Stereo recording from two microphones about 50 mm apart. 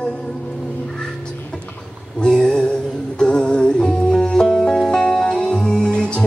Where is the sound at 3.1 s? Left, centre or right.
Centre.